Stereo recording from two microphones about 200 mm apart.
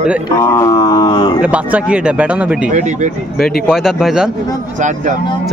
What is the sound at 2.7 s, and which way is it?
Speech, 35° right (ahead or behind).